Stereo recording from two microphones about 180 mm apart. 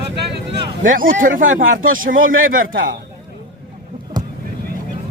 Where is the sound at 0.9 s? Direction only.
50° right (ahead or behind).